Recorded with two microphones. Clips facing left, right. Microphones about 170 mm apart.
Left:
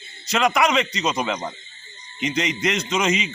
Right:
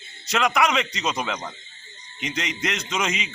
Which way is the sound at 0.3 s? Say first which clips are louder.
Left 2 dB; 5° right (ahead or behind).